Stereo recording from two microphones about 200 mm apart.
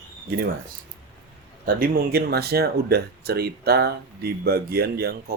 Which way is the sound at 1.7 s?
50° right (ahead or behind).